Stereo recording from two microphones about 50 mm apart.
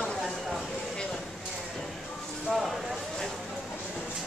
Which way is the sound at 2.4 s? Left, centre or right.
Centre.